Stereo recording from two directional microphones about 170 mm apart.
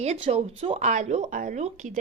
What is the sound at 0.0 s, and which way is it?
Speech, 40° right (ahead or behind).